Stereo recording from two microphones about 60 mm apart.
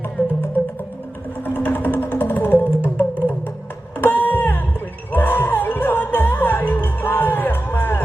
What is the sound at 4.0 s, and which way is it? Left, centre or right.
Music, left.